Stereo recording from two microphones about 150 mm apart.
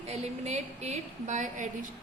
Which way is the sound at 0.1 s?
45° right (ahead or behind).